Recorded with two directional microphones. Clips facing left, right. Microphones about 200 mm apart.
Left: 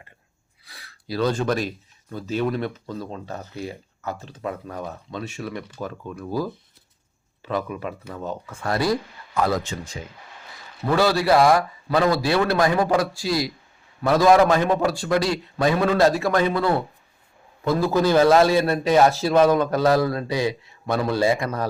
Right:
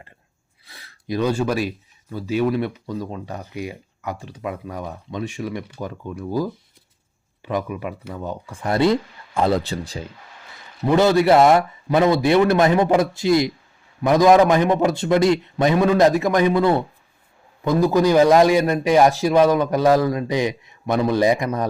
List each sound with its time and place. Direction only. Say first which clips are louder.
0.6 s gasp: right 3 dB; 25° right (ahead or behind)
2.1 s speech: right 4 dB; 10° right (ahead or behind)
8.7 s a man's voice: right 5 dB; 25° right (ahead or behind)
10.8 s a man's voice: right 4 dB; 20° right (ahead or behind)